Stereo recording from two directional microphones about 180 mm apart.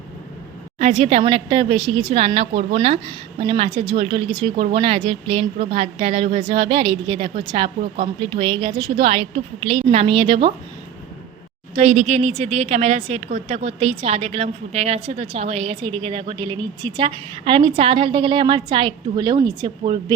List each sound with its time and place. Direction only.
0.8 s a woman's voice: 35° right (ahead or behind)
11.7 s a woman's voice: 40° right (ahead or behind)